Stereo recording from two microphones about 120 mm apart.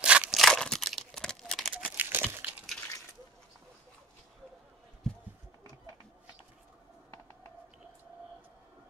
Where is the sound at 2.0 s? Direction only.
15° right (ahead or behind).